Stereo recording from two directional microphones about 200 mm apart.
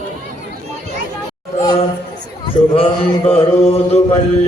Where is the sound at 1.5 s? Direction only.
35° left (ahead or behind).